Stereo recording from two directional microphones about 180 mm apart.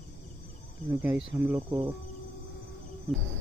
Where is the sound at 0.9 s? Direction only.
10° right (ahead or behind).